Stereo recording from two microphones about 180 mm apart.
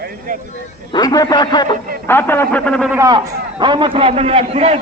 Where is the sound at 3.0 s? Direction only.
25° right (ahead or behind).